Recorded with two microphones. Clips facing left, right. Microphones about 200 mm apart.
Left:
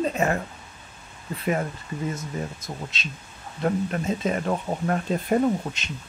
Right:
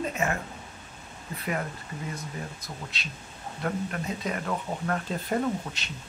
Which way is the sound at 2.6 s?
20° left (ahead or behind).